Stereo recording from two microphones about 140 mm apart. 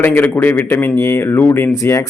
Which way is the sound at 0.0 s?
15° left (ahead or behind).